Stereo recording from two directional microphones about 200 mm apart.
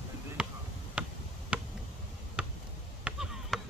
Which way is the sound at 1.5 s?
5° right (ahead or behind).